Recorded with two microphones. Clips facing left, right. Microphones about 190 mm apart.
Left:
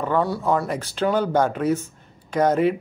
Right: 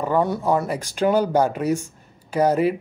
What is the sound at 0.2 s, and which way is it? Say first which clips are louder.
Speech: right 1 dB; 15° right (ahead or behind).